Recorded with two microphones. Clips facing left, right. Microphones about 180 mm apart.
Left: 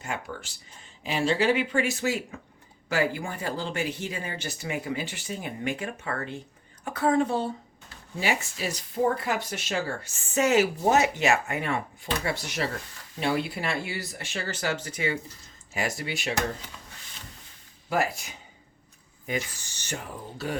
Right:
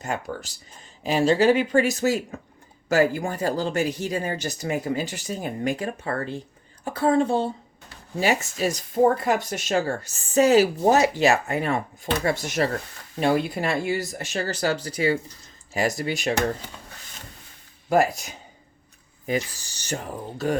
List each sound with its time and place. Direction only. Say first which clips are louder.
0.0 s a woman's voice: right 5 dB; 40° right (ahead or behind)
8.1 s speech: right 5 dB; 40° right (ahead or behind)
17.8 s speech: right 7 dB; 45° right (ahead or behind)